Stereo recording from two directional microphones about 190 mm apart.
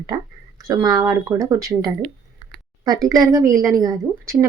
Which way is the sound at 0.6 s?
20° right (ahead or behind).